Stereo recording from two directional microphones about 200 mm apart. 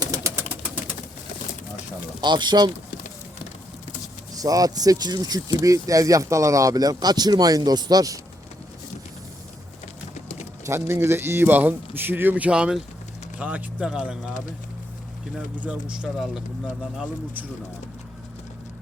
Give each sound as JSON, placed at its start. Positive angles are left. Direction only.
{"t": 0.0, "sound": "a sound", "side_deg": -15}
{"t": 2.2, "sound": "speech", "side_deg": -20}
{"t": 4.4, "sound": "speech", "side_deg": -20}
{"t": 10.7, "sound": "a man's voice", "side_deg": -15}
{"t": 15.4, "sound": "a man's voice", "side_deg": -5}